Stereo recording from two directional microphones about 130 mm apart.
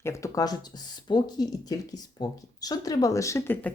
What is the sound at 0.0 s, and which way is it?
Speech, 25° left (ahead or behind).